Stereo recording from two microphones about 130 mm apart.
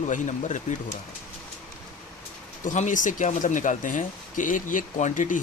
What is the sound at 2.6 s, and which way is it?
Speech, 75° left (ahead or behind).